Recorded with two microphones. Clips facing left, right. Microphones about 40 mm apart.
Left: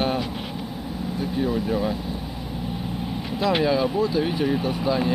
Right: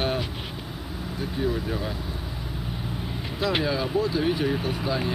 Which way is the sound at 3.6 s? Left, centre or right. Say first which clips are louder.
Left 4 dB; centre.